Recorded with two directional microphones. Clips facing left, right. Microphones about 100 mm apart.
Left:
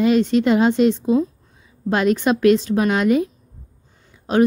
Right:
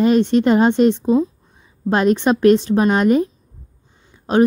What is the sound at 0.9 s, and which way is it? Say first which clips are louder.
A woman's voice: right 2 dB; 30° right (ahead or behind).